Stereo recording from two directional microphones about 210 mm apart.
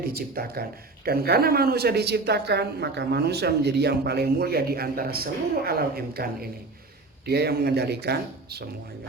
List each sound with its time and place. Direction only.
0.0 s a man's voice: 45° right (ahead or behind)